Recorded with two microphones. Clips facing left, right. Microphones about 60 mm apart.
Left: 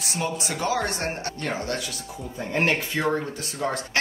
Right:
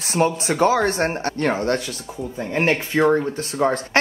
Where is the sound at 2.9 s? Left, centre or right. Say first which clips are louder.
Right 8 dB; right.